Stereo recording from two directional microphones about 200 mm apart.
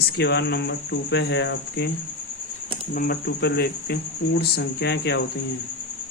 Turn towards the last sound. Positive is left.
turn(degrees=55)  # may be behind; listen again after turning